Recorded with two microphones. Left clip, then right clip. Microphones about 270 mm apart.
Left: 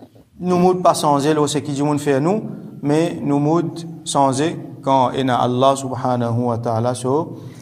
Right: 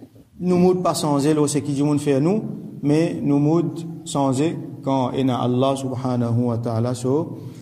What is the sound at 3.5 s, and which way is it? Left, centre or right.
Speech, centre.